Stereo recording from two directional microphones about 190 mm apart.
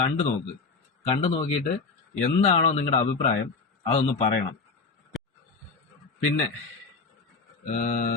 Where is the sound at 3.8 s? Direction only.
35° left (ahead or behind).